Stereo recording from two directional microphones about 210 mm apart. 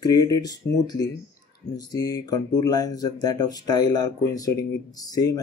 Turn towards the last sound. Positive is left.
turn(degrees=15)  # may be behind; listen again after turning